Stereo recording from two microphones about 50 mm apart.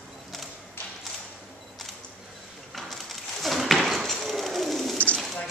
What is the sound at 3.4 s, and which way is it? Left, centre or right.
Bird, centre.